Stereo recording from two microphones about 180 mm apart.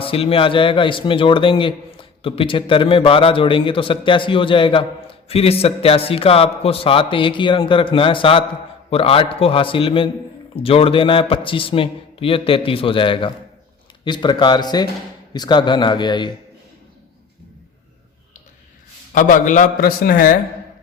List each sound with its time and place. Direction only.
0.0 s a man's voice: 30° left (ahead or behind)
19.1 s a man's voice: 45° left (ahead or behind)